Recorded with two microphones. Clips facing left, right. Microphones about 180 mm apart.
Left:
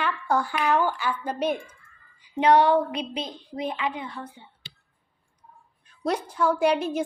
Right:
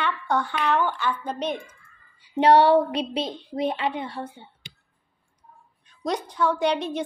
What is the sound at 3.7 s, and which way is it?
Speech, 35° right (ahead or behind).